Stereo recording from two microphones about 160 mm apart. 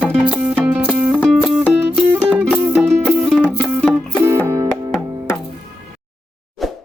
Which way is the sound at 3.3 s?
5° left (ahead or behind).